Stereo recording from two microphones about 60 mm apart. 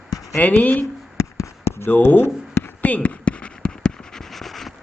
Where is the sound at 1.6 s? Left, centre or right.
Left.